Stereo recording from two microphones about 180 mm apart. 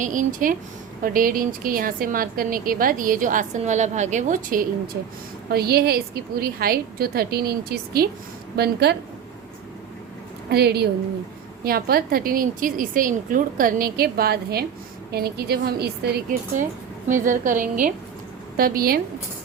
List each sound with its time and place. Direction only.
0.0 s a woman's voice: 45° right (ahead or behind)
5.5 s a woman's voice: 60° right (ahead or behind)
10.5 s a woman's voice: 65° right (ahead or behind)
17.1 s a woman's voice: 45° right (ahead or behind)